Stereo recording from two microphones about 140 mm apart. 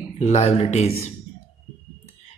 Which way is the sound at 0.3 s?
50° left (ahead or behind).